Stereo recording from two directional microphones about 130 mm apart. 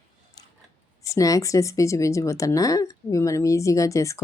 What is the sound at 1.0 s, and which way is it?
Speech, 25° left (ahead or behind).